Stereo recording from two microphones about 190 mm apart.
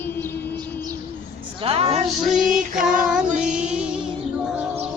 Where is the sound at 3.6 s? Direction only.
5° right (ahead or behind).